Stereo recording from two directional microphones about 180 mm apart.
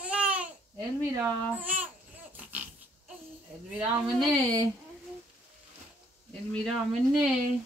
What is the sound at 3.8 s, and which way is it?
Speech, 5° right (ahead or behind).